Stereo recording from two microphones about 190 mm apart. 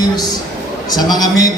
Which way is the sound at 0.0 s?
20° left (ahead or behind).